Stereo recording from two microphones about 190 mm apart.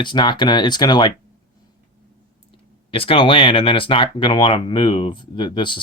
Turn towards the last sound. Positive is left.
turn(degrees=25)  # may be behind; listen again after turning